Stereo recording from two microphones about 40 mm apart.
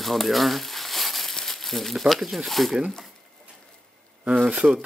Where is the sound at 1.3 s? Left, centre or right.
Centre.